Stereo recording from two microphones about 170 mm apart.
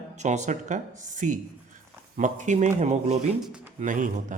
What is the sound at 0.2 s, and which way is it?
Speech, 45° right (ahead or behind).